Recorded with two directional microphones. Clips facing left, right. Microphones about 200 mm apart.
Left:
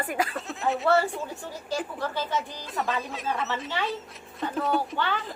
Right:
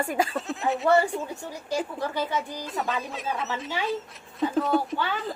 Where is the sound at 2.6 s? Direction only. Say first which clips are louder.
Even; centre (ahead or behind).